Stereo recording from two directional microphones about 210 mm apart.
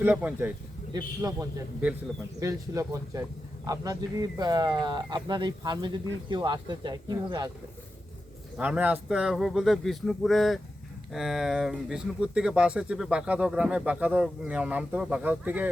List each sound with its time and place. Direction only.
0.0 s speech: 10° right (ahead or behind)
8.5 s speech: 5° right (ahead or behind)